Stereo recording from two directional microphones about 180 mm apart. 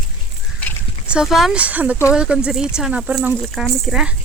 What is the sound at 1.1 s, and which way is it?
Speech, 5° right (ahead or behind).